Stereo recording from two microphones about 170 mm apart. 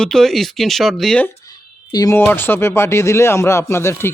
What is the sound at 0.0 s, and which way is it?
Speech, 5° left (ahead or behind).